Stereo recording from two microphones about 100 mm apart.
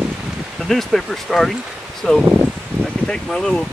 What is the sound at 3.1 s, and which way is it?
Speech, 5° left (ahead or behind).